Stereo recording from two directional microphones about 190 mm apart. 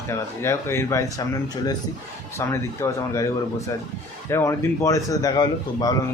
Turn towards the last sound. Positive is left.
turn(degrees=20)  # may be behind; listen again after turning